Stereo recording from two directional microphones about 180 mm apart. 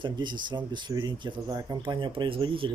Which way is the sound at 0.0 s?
25° right (ahead or behind).